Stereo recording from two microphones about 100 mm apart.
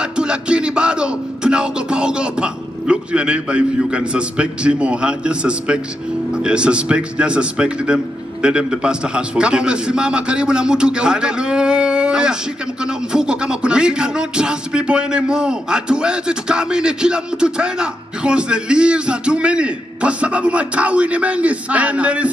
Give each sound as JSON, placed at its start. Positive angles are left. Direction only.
{"t": 0.0, "sound": "music", "side_deg": -10}